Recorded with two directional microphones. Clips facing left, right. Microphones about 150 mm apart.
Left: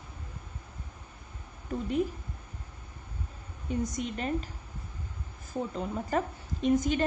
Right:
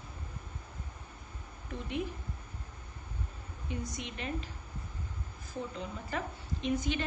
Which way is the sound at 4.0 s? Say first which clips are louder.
Left 7 dB; 40° left (ahead or behind).